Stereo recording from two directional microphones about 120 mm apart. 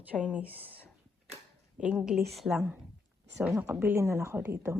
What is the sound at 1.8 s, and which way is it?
Speech, 5° right (ahead or behind).